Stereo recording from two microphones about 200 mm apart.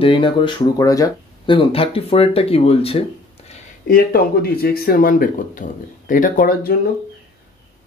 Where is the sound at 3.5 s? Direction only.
45° left (ahead or behind).